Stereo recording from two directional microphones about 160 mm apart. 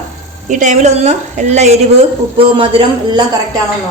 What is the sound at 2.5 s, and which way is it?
Speech, 30° right (ahead or behind).